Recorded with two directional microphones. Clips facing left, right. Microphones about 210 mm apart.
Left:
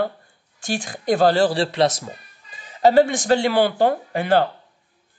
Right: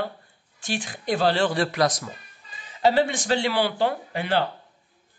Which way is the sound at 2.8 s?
45° left (ahead or behind).